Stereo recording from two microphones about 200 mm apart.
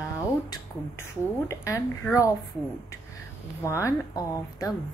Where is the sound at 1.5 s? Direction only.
15° left (ahead or behind).